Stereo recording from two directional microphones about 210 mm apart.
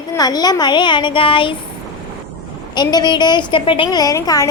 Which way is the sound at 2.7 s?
20° left (ahead or behind).